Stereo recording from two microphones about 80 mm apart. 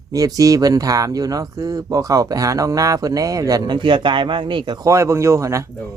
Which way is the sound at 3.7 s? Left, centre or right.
Right.